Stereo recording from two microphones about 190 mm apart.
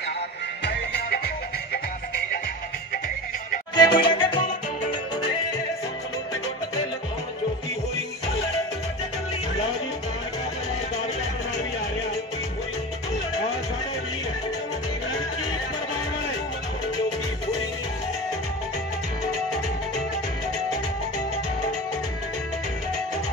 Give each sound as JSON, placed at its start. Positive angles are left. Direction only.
{"t": 0.7, "sound": "music", "side_deg": 60}
{"t": 3.7, "sound": "music", "side_deg": 20}